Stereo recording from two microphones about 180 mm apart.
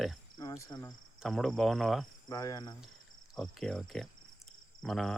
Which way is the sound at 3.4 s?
5° left (ahead or behind).